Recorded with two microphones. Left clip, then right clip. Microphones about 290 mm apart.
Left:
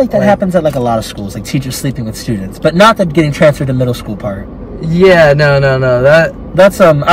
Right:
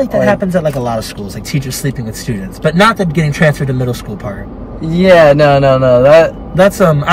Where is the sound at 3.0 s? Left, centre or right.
Centre.